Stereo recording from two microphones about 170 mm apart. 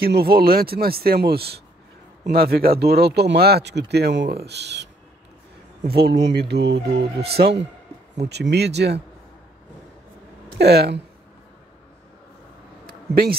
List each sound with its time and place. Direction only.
0.0 s speech: 65° right (ahead or behind); by 4.8 s 85° right
5.9 s speech: 65° right (ahead or behind); by 7.1 s 85° right
7.2 s speech: 70° right (ahead or behind)
8.2 s speech: 80° right
10.6 s speech: 75° right (ahead or behind)
12.8 s a sound: 65° right (ahead or behind)